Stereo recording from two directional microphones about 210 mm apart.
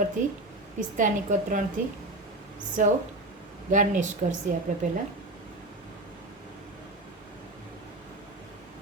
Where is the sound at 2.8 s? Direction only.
35° right (ahead or behind).